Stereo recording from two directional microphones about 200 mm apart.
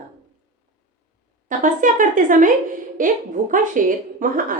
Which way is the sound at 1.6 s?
40° right (ahead or behind).